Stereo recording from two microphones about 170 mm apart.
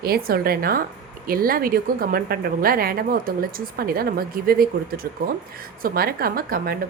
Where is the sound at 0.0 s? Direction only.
65° right (ahead or behind).